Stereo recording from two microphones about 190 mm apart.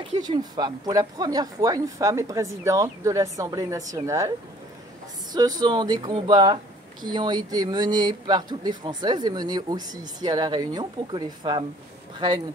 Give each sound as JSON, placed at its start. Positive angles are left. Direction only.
{"t": 0.2, "sound": "speech", "side_deg": -20}
{"t": 5.6, "sound": "speech", "side_deg": -20}